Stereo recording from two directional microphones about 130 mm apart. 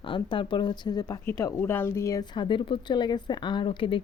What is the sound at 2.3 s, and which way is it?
Speech, 40° left (ahead or behind).